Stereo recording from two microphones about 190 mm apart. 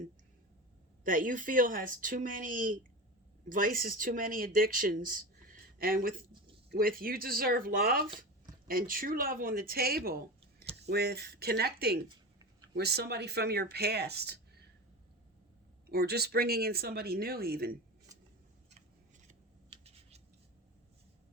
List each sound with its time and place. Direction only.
1.0 s speech: 45° right (ahead or behind)
15.9 s speech: 55° right (ahead or behind)
19.8 s scissors: 35° right (ahead or behind)